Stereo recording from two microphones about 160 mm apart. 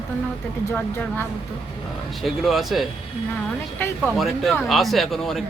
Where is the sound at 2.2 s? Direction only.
Centre (ahead or behind).